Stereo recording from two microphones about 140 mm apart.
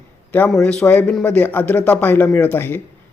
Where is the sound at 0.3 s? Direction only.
10° left (ahead or behind).